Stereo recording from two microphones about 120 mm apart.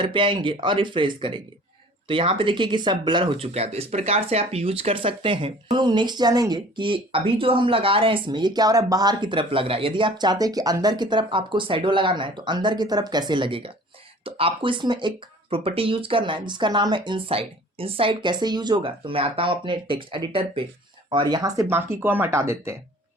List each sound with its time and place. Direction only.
0.0 s speech: 45° right (ahead or behind)
21.7 s speech: 20° right (ahead or behind)